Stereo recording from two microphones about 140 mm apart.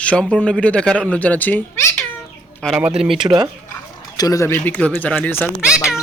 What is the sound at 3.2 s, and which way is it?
Speech, 30° right (ahead or behind).